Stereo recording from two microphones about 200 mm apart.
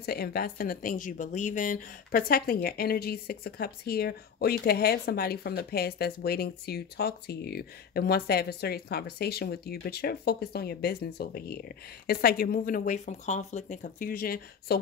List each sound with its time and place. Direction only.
0.0 s a woman's voice: 50° left (ahead or behind)